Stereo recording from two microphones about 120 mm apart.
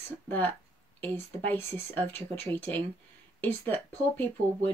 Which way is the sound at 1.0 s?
15° left (ahead or behind).